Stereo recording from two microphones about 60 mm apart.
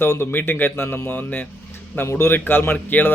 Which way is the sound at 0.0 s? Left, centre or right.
Left.